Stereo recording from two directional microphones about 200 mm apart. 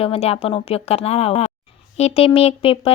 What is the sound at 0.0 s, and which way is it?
Speech, 30° left (ahead or behind).